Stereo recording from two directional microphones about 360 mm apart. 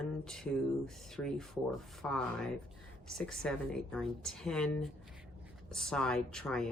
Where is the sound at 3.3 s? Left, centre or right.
Centre.